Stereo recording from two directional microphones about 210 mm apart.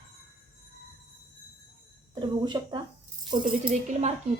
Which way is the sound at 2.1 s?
20° right (ahead or behind).